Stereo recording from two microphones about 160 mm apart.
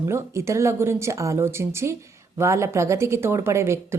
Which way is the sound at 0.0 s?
15° right (ahead or behind).